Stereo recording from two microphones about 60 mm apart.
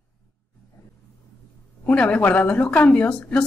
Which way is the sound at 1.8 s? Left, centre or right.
Centre.